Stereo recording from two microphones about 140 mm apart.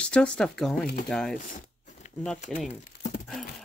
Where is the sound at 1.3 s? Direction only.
60° left (ahead or behind).